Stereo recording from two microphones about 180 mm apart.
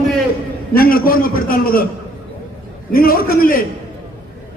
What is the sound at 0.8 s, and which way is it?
A man's voice, 55° left (ahead or behind).